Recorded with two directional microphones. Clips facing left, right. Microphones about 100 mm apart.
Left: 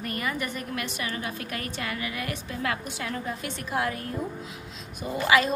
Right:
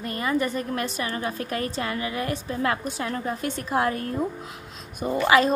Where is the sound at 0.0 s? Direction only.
30° right (ahead or behind).